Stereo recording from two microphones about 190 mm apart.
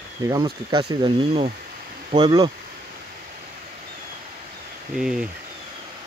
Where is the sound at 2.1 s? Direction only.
25° right (ahead or behind).